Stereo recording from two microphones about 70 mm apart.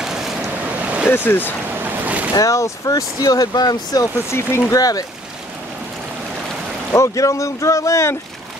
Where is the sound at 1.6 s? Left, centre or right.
Right.